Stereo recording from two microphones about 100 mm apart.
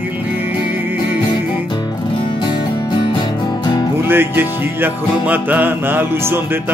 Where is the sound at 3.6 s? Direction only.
45° left (ahead or behind).